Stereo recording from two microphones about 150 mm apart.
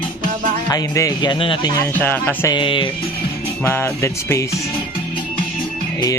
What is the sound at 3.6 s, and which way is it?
Speech, 15° left (ahead or behind).